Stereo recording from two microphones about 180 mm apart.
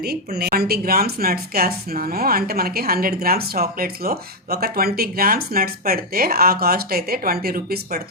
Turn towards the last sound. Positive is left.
turn(degrees=-55)  # may be behind; listen again after turning